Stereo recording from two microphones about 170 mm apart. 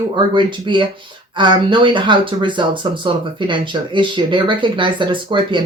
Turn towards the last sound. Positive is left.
turn(degrees=-30)  # may be behind; listen again after turning